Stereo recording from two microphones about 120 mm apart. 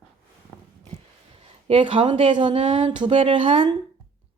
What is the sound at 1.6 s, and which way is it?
A woman's voice, 45° right (ahead or behind).